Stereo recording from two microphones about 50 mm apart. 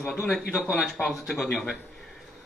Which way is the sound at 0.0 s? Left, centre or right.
Centre.